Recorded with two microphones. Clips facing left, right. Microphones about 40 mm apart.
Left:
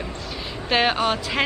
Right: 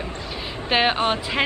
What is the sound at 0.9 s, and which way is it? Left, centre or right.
Speech, right.